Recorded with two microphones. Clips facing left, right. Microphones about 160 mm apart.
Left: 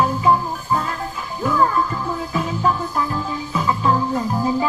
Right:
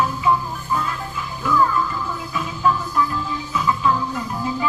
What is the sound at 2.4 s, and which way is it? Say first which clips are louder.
Music: even; 35° left (ahead or behind).